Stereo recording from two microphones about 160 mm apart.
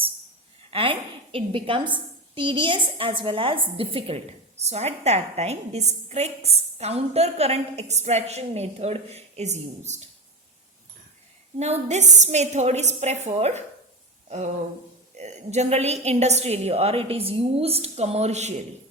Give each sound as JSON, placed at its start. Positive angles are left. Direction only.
{"t": 0.7, "sound": "a woman's voice", "side_deg": -35}
{"t": 11.6, "sound": "a woman's voice", "side_deg": -45}
{"t": 14.3, "sound": "a sound", "side_deg": -45}
{"t": 15.1, "sound": "a woman's voice", "side_deg": -45}